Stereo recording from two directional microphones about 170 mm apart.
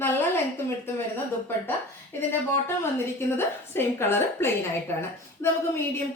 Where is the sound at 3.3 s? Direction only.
15° left (ahead or behind).